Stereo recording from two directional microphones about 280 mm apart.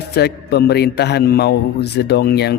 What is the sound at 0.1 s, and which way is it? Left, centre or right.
Speech, left.